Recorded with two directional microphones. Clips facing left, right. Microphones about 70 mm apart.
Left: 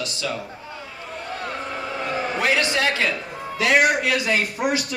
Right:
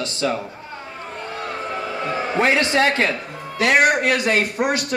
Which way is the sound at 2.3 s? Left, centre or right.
Right.